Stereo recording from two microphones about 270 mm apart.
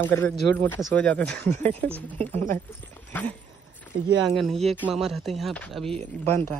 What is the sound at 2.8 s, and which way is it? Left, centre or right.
Speech, centre.